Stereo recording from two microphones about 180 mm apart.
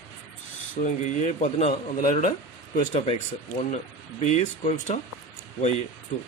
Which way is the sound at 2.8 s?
35° left (ahead or behind).